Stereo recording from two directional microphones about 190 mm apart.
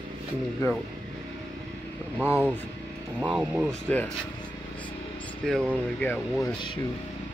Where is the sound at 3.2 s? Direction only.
10° right (ahead or behind).